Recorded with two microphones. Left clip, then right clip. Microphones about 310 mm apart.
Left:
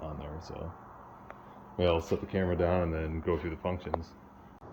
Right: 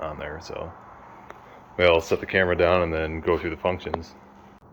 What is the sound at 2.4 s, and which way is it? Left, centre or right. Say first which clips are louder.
Speech: right 10 dB; centre.